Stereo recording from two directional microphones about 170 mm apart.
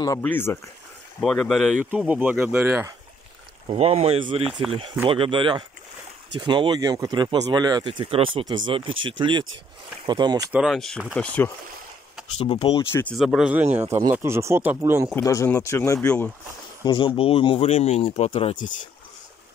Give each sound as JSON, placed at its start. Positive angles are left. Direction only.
{"t": 0.2, "sound": "speech", "side_deg": 10}
{"t": 1.9, "sound": "speech", "side_deg": -10}
{"t": 3.6, "sound": "speech", "side_deg": -40}
{"t": 10.5, "sound": "speech", "side_deg": 0}
{"t": 12.4, "sound": "speech", "side_deg": 30}
{"t": 13.0, "sound": "speech", "side_deg": 5}
{"t": 15.2, "sound": "speech", "side_deg": 15}
{"t": 16.8, "sound": "speech", "side_deg": 30}